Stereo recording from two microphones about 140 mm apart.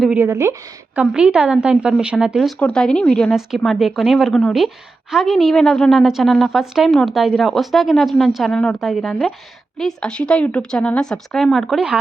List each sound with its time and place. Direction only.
0.0 s a woman's voice: 15° right (ahead or behind)
0.9 s a woman's voice: 5° right (ahead or behind)